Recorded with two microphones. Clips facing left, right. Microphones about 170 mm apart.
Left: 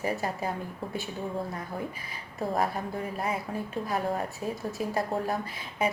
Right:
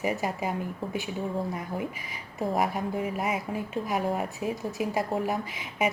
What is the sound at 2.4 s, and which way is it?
A woman's voice, 15° right (ahead or behind).